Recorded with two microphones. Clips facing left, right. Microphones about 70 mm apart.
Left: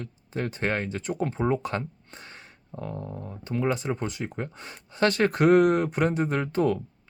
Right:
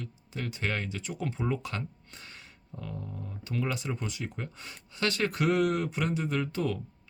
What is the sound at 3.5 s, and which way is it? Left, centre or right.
Speech, left.